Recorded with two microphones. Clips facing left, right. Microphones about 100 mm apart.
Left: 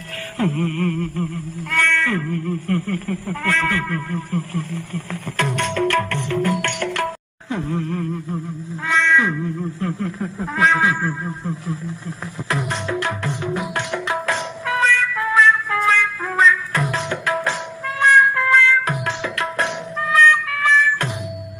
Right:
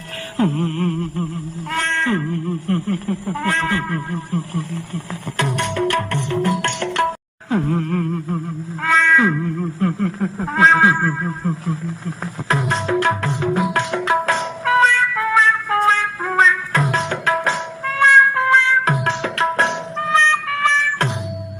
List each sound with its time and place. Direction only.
0.3 s music: 20° right (ahead or behind)
0.7 s humming: 35° right (ahead or behind)
1.7 s cat: 20° right (ahead or behind)
7.5 s humming: 40° right (ahead or behind)
8.8 s a sound: 40° right (ahead or behind)
9.8 s cat: 35° right (ahead or behind)
10.9 s music: 45° right (ahead or behind)